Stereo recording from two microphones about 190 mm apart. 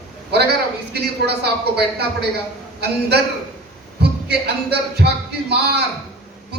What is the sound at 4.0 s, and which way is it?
A woman's voice, 60° right (ahead or behind).